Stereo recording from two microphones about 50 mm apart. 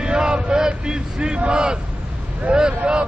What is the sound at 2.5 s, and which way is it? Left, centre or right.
Speech, centre.